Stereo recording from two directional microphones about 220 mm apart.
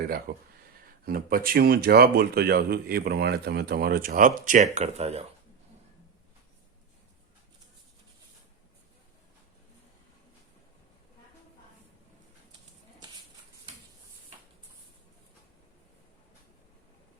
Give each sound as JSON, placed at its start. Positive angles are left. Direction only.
{"t": 0.3, "sound": "speech", "side_deg": -40}